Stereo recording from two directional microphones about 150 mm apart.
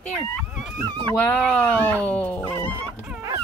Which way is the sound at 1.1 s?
10° left (ahead or behind).